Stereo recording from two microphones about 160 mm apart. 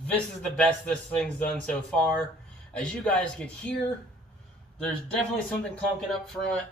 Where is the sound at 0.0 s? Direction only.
10° left (ahead or behind).